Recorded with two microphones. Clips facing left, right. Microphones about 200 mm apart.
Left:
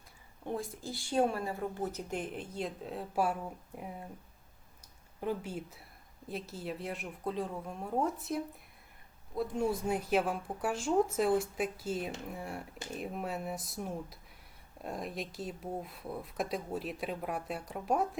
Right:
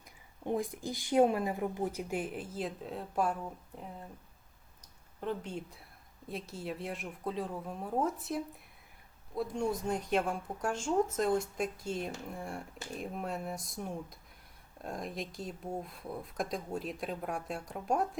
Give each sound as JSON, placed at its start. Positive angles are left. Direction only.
{"t": 0.4, "sound": "speech", "side_deg": -15}
{"t": 5.2, "sound": "speech", "side_deg": 5}